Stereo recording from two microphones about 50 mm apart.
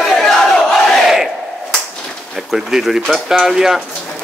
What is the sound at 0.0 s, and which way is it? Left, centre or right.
Battle cry, centre.